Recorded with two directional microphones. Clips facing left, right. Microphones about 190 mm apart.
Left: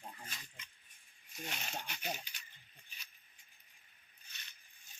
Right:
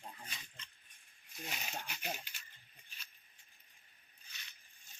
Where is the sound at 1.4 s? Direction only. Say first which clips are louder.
Left 1 dB; 5° right (ahead or behind).